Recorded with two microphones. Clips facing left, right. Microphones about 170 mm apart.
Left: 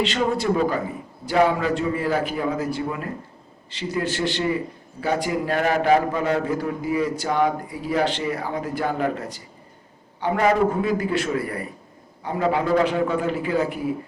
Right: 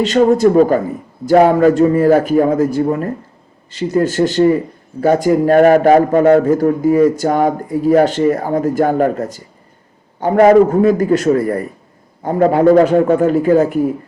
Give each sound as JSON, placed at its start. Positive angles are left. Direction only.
{"t": 0.0, "sound": "a man's voice", "side_deg": -45}